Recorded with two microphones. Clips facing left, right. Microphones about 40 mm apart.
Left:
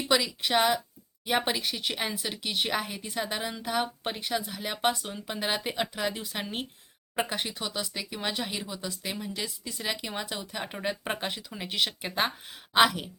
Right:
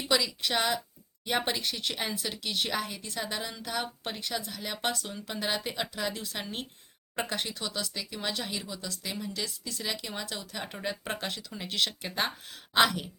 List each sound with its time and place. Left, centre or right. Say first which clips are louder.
0.1 s speech: left 2 dB; centre